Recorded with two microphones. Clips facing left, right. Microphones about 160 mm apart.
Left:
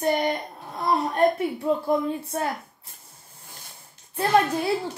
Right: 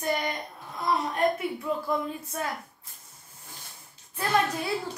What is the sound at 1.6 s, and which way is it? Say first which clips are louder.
Speech: left 6 dB; 35° left (ahead or behind).